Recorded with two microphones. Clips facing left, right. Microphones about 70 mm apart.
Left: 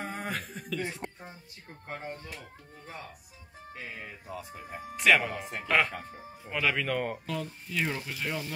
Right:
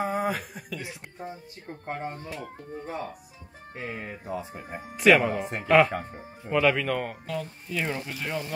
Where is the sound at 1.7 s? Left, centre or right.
Right.